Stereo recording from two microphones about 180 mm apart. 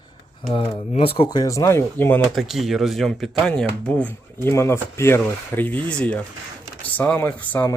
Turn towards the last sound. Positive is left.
turn(degrees=10)  # may be behind; listen again after turning